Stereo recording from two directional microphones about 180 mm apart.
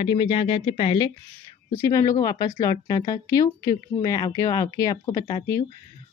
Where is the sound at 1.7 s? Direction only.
15° left (ahead or behind).